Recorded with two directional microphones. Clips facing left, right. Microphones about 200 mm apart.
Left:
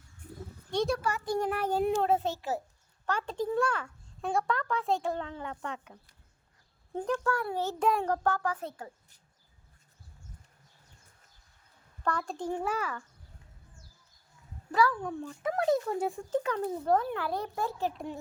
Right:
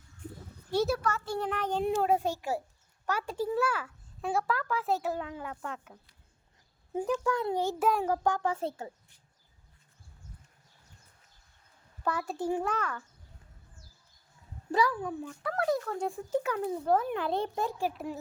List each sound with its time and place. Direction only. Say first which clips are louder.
0.7 s a child's voice: right 1 dB; 5° right (ahead or behind)
1.0 s speech: left 2 dB; 15° left (ahead or behind)
2.0 s a child's voice: even; 10° right (ahead or behind)
7.3 s speech: right 2 dB; 20° right (ahead or behind)
8.4 s a woman's voice: right 3 dB; 25° right (ahead or behind)
12.0 s speech: right 1 dB; 5° right (ahead or behind)
12.6 s speech: even; 5° left (ahead or behind)
15.0 s a child's voice: even; 5° right (ahead or behind)
15.4 s speech: left 3 dB; 20° left (ahead or behind)
16.0 s a child's voice: left 1 dB; centre (ahead or behind)
17.1 s speech: right 3 dB; 20° right (ahead or behind); by 18.2 s 5° right (ahead or behind)